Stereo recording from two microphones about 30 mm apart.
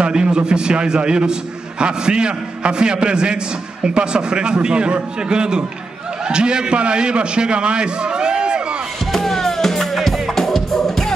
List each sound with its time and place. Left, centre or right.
0.1 s a man's voice: right
9.1 s music: centre